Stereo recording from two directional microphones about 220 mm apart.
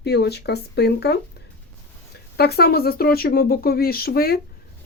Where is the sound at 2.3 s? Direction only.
45° left (ahead or behind).